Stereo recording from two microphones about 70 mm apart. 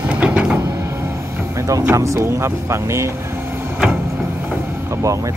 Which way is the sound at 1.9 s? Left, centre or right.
Right.